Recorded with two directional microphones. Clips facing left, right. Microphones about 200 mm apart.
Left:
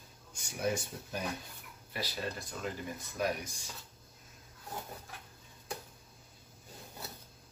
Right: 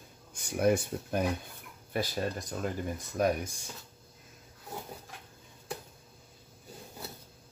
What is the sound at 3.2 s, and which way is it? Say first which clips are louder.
Speech: right 6 dB; 50° right (ahead or behind).